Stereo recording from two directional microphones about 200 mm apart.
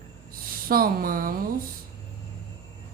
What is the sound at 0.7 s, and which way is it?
Speech, 45° right (ahead or behind).